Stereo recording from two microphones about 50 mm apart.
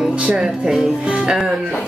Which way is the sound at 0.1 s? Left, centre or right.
Centre.